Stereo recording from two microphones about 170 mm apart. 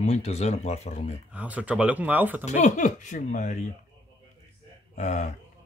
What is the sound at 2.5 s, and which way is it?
Speech, 45° left (ahead or behind).